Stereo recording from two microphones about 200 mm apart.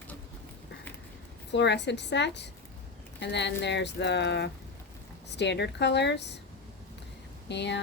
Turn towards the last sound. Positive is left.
turn(degrees=60)  # may be behind; listen again after turning